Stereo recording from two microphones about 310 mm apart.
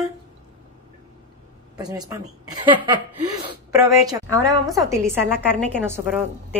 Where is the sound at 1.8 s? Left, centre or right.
Centre.